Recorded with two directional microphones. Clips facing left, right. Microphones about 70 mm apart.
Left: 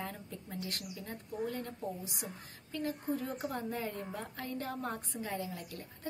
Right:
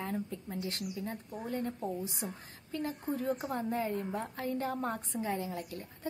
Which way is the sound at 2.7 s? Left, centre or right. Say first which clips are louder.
Even; right.